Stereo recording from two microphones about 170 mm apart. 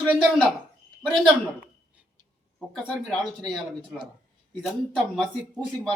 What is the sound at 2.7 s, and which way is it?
Speech, centre (ahead or behind).